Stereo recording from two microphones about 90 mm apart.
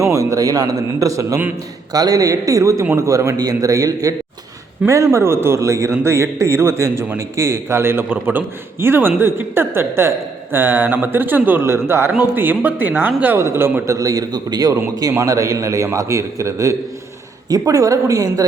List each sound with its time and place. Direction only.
0.1 s a man's voice: 40° right (ahead or behind)
13.9 s a man's voice: 40° right (ahead or behind)